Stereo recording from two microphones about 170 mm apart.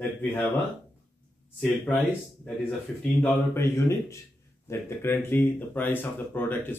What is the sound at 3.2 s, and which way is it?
Speech, 15° left (ahead or behind).